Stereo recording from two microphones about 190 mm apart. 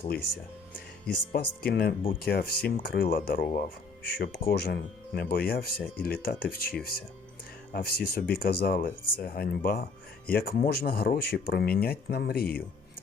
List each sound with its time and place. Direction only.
1.3 s speech: 55° left (ahead or behind)